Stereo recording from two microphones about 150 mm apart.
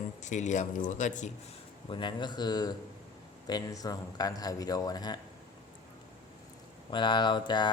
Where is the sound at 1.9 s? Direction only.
30° left (ahead or behind).